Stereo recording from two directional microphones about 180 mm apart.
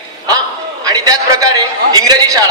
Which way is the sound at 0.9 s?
20° right (ahead or behind).